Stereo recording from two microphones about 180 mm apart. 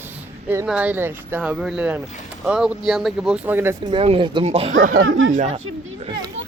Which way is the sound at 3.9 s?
30° right (ahead or behind).